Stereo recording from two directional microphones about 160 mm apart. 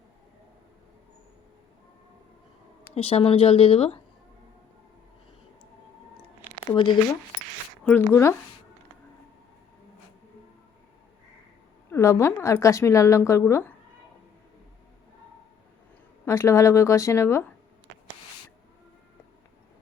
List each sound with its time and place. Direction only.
2.9 s speech: 40° left (ahead or behind)
6.7 s a woman's voice: 30° left (ahead or behind)
7.9 s speech: 15° left (ahead or behind)
11.9 s a woman's voice: 20° left (ahead or behind)
16.2 s speech: 15° left (ahead or behind)